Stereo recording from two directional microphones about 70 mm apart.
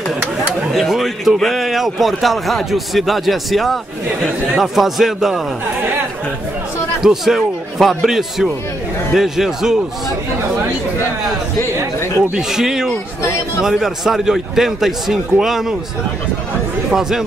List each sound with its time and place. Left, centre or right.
0.7 s a man's voice: centre
5.8 s chatter: right
7.0 s a man's voice: centre
12.2 s a man's voice: centre